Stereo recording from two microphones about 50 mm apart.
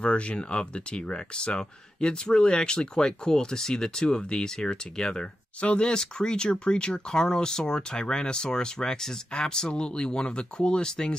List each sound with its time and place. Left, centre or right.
0.0 s speech: left